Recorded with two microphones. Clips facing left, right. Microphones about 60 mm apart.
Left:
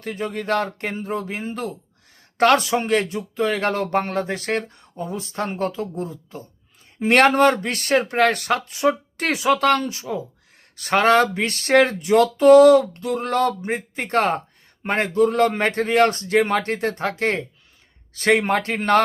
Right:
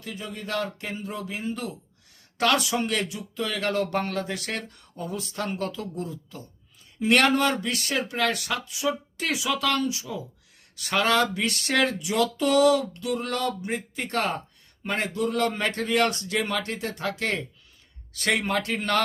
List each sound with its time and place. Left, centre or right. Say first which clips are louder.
0.0 s speech: left 9 dB; left